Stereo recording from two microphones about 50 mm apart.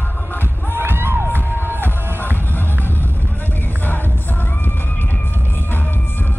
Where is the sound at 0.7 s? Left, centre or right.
Right.